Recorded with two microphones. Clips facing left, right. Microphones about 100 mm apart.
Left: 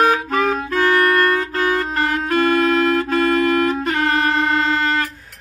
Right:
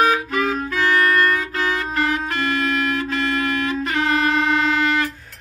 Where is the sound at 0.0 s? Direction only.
50° left (ahead or behind).